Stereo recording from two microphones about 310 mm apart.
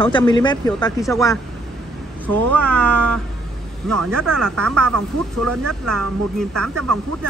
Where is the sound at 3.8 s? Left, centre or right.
Right.